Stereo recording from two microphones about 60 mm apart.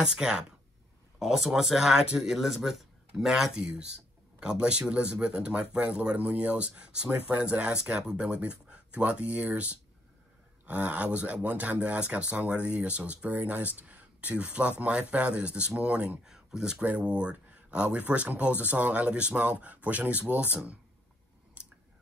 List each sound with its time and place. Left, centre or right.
0.1 s speech: centre
16.3 s speech: centre
16.7 s speech: right
21.6 s whispering: right